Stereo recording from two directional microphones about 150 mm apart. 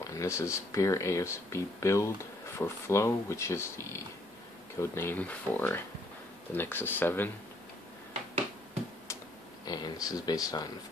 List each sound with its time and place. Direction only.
0.0 s speech: 20° left (ahead or behind)
9.7 s speech: 25° left (ahead or behind)